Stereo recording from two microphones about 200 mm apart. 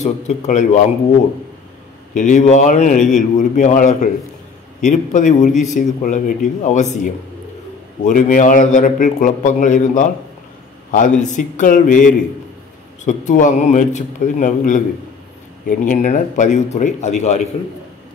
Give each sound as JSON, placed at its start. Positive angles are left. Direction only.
{"t": 0.0, "sound": "a man's voice", "side_deg": 35}
{"t": 2.1, "sound": "a man's voice", "side_deg": 40}
{"t": 8.0, "sound": "a man's voice", "side_deg": 35}
{"t": 15.8, "sound": "a man's voice", "side_deg": 40}